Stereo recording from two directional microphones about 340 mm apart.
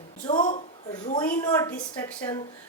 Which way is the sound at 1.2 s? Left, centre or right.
Centre.